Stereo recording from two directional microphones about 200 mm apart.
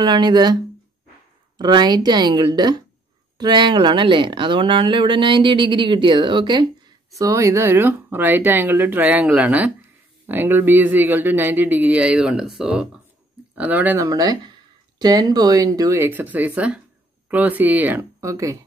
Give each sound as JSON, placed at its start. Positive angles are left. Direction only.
{"t": 0.0, "sound": "speech", "side_deg": -20}
{"t": 1.6, "sound": "speech", "side_deg": -20}